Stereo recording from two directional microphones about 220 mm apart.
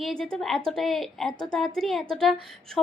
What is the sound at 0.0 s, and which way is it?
A woman's voice, 5° left (ahead or behind).